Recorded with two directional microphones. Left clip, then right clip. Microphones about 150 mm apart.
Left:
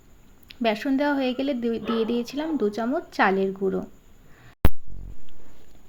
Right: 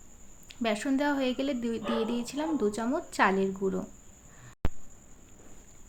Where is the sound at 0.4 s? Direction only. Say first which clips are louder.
Left 6 dB; 20° left (ahead or behind).